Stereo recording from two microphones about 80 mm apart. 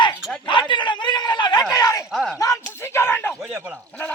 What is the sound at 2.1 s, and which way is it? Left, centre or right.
Speech, centre.